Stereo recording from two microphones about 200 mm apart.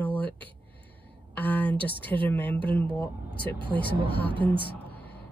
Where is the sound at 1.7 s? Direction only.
25° right (ahead or behind).